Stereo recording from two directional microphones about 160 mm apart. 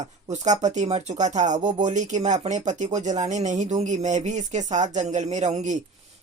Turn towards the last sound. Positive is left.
turn(degrees=-45)  # may be behind; listen again after turning